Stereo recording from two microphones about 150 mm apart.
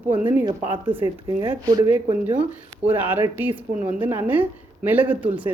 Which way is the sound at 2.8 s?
10° right (ahead or behind).